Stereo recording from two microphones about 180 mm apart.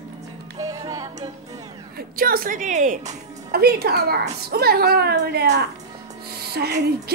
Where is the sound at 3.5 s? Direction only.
60° right (ahead or behind).